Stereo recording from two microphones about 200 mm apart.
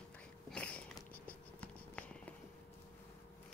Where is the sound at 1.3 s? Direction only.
5° left (ahead or behind).